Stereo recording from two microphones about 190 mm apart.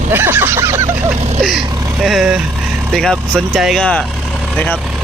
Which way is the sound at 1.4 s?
Centre (ahead or behind).